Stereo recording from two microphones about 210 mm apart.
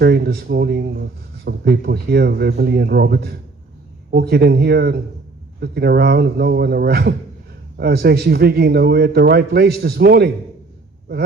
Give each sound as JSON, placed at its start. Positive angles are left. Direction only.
{"t": 0.0, "sound": "a man's voice", "side_deg": -50}